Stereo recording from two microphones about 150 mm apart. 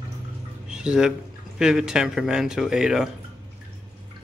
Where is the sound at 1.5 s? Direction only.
5° right (ahead or behind).